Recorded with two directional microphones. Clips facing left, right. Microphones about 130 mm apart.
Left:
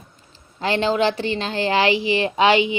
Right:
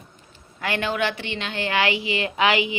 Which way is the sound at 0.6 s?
30° left (ahead or behind).